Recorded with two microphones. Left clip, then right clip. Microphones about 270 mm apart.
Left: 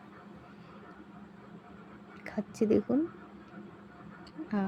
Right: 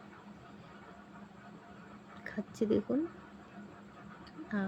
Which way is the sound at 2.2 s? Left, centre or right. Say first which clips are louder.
Left 4 dB; centre.